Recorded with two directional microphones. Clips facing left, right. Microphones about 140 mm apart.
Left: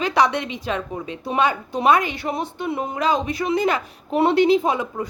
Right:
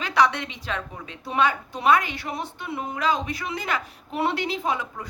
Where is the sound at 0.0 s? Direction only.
15° left (ahead or behind).